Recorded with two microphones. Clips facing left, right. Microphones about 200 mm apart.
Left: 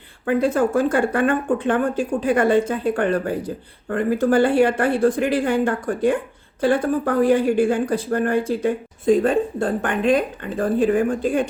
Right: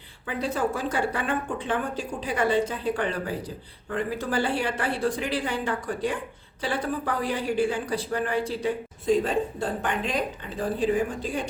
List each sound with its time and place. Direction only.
0.3 s speech: 50° left (ahead or behind)